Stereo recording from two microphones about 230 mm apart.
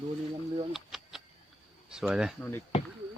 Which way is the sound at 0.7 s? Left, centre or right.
Centre.